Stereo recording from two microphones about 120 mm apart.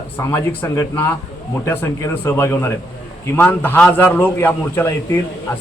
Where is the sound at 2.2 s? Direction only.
20° left (ahead or behind).